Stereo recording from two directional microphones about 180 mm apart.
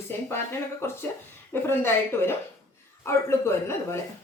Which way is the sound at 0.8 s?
15° left (ahead or behind).